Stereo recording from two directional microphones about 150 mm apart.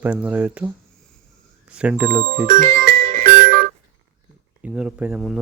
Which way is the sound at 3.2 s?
90° right.